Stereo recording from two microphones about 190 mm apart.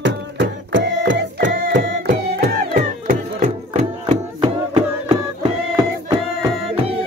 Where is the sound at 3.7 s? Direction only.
30° right (ahead or behind).